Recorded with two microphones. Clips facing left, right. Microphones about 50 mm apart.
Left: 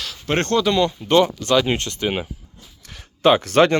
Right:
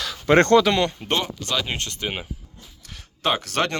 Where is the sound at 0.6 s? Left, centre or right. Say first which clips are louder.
Left 2 dB; right.